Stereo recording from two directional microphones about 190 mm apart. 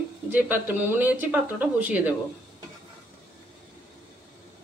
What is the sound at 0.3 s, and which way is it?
Speech, 10° right (ahead or behind).